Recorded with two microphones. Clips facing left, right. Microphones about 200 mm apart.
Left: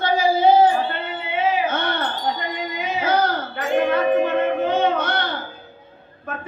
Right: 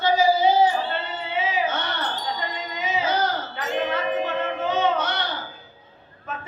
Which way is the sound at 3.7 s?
55° left (ahead or behind).